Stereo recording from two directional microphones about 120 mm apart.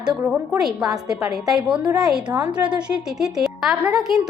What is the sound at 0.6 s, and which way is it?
A woman's voice, 5° right (ahead or behind).